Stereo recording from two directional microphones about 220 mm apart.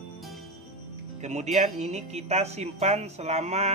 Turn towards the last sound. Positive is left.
turn(degrees=-30)  # may be behind; listen again after turning